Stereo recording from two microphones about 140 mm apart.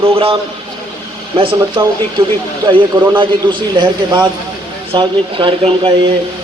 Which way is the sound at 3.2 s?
35° right (ahead or behind).